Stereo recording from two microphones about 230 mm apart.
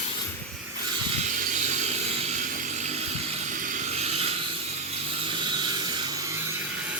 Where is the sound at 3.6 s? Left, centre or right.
Right.